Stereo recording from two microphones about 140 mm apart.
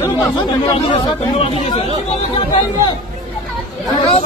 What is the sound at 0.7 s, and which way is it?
Speech, 35° left (ahead or behind).